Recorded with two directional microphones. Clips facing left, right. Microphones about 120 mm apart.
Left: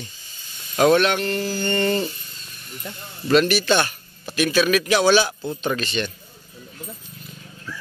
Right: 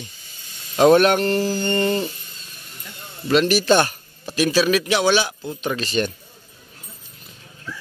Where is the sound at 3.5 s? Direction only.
40° right (ahead or behind).